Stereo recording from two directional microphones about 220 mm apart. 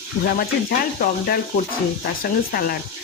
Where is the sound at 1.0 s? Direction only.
40° left (ahead or behind).